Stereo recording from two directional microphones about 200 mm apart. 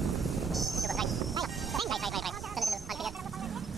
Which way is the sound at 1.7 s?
Centre (ahead or behind).